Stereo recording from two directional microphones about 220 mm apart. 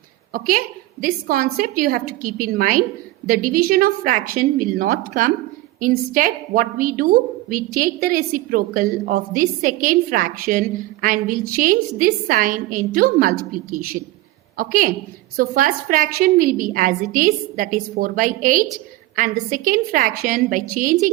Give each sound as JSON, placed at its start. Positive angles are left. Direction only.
{"t": 0.3, "sound": "a woman's voice", "side_deg": -40}